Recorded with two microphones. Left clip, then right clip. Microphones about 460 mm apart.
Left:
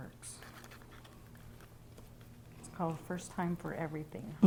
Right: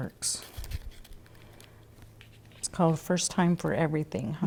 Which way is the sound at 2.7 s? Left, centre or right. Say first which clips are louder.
Right 12 dB; right.